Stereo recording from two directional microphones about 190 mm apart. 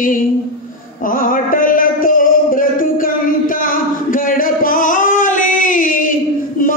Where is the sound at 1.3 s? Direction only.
45° left (ahead or behind).